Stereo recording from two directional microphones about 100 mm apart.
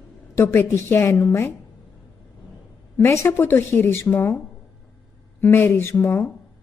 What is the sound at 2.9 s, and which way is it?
A woman's voice, 30° left (ahead or behind).